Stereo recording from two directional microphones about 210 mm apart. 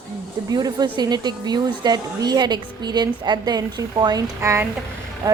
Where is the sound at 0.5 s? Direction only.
20° right (ahead or behind).